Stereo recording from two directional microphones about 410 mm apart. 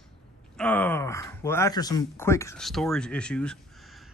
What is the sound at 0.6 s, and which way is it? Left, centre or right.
Speech, centre.